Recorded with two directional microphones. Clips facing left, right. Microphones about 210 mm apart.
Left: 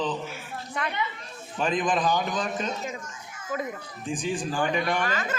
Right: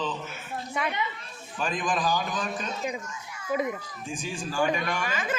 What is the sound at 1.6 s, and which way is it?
A man's voice, 20° left (ahead or behind).